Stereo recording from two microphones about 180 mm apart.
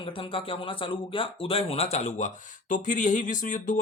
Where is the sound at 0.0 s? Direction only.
30° left (ahead or behind).